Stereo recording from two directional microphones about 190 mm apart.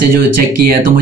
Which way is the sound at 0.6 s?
50° right (ahead or behind).